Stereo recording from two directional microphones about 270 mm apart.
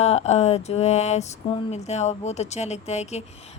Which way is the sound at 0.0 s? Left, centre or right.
Left.